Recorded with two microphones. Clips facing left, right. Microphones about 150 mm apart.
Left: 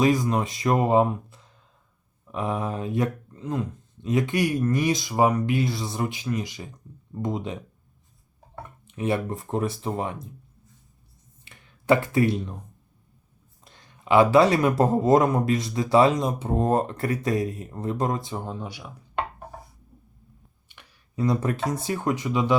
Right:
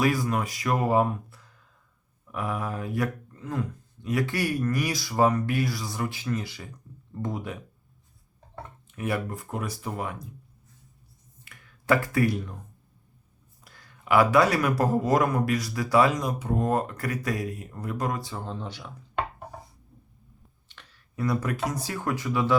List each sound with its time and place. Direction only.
0.0 s speech: 20° left (ahead or behind)
8.9 s speech: 25° left (ahead or behind)
11.4 s a sound: 25° left (ahead or behind)
13.7 s speech: 20° left (ahead or behind)
20.7 s a sound: 10° left (ahead or behind)
21.7 s speech: 20° left (ahead or behind)